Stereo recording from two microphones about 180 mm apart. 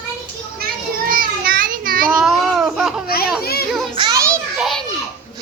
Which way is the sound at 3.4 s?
60° left (ahead or behind).